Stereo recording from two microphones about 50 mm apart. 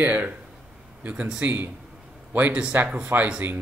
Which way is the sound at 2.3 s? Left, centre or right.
Right.